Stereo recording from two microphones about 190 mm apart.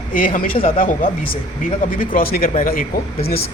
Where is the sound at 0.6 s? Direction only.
30° left (ahead or behind).